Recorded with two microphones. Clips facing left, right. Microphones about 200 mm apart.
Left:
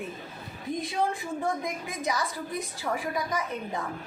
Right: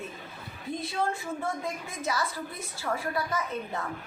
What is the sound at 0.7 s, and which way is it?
A woman's voice, 15° left (ahead or behind).